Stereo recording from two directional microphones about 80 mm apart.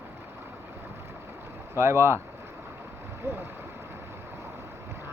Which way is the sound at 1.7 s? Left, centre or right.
Right.